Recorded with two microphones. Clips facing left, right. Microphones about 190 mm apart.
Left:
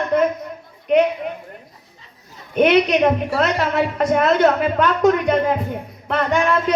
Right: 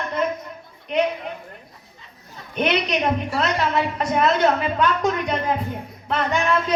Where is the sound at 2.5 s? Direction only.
55° left (ahead or behind).